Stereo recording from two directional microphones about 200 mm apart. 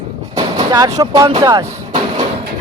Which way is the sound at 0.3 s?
20° right (ahead or behind).